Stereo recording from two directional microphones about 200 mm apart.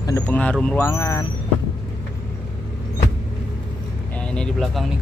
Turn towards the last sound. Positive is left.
turn(degrees=0)  # may be behind; listen again after turning